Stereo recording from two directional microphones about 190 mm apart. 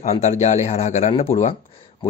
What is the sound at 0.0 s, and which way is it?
Speech, 35° left (ahead or behind).